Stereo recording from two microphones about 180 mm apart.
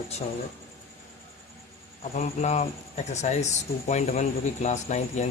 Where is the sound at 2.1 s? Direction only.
40° left (ahead or behind).